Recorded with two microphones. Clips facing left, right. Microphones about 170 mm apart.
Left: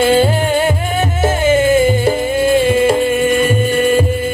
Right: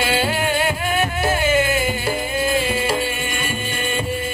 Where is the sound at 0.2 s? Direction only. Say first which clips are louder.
Left 7 dB; 35° left (ahead or behind).